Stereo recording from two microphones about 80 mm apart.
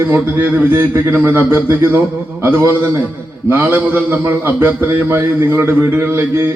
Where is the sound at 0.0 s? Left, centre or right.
Right.